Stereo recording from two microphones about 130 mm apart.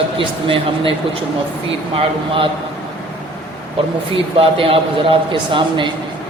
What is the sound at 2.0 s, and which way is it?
Speech, 45° right (ahead or behind).